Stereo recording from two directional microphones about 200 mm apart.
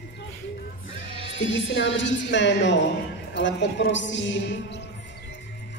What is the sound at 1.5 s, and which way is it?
A woman's voice, 65° left (ahead or behind).